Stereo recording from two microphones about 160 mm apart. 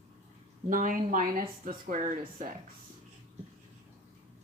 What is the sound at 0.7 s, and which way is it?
Speech, 55° right (ahead or behind).